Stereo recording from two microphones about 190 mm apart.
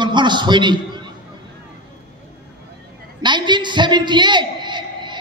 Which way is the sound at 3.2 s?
25° right (ahead or behind).